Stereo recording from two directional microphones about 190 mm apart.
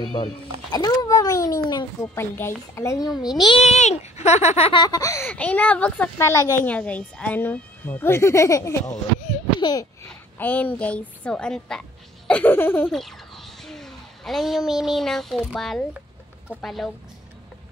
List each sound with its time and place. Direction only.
0.0 s a woman's voice: 20° left (ahead or behind)
10.0 s a woman's voice: 10° left (ahead or behind)
12.3 s a sound: 10° left (ahead or behind)
16.4 s speech: centre (ahead or behind)